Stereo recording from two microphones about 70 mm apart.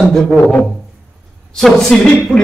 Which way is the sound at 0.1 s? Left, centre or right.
Centre.